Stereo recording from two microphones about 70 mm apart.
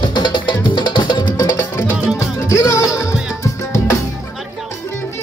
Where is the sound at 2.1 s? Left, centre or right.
Left.